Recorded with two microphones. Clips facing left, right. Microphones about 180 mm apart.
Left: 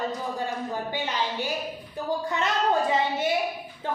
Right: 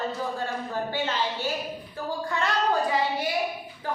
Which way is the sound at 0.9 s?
15° left (ahead or behind).